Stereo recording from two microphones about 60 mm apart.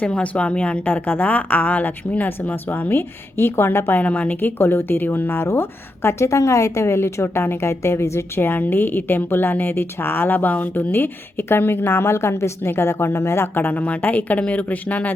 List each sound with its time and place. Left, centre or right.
0.0 s speech: centre; by 4.0 s left
4.0 s speech: left
4.4 s a woman's voice: left
8.4 s a woman's voice: left